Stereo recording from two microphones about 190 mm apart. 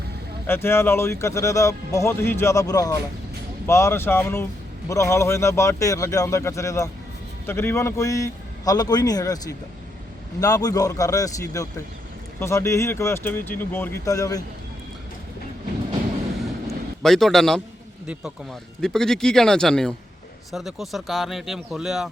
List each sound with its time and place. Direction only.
0.4 s speech: 10° left (ahead or behind)
16.6 s a sound: centre (ahead or behind)
18.0 s speech: 5° right (ahead or behind)